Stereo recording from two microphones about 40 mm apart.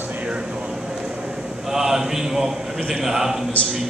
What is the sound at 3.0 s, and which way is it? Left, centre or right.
Speech, centre.